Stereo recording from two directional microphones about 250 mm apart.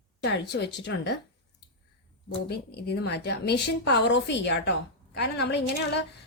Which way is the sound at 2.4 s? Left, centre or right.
Left.